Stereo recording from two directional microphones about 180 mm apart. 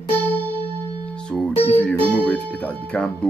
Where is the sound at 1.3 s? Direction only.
5° left (ahead or behind).